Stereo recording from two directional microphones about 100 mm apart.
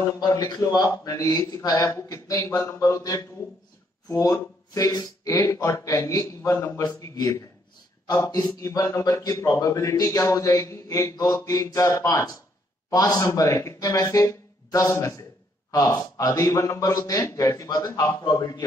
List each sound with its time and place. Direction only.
0.2 s speech: 45° left (ahead or behind)